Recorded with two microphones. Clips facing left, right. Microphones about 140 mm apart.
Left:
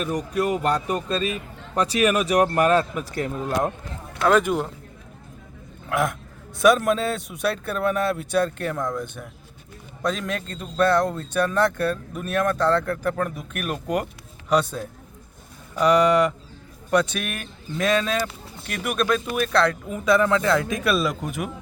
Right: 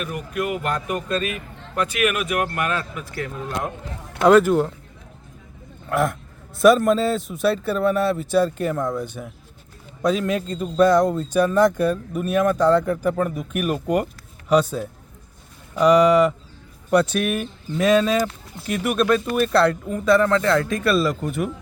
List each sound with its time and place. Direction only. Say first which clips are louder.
0.0 s a man's voice: left 2 dB; 35° left (ahead or behind)
4.3 s speech: right 5 dB; 5° right (ahead or behind)
5.9 s speech: right 2 dB; centre (ahead or behind)
19.9 s speech: right 2 dB; 5° left (ahead or behind)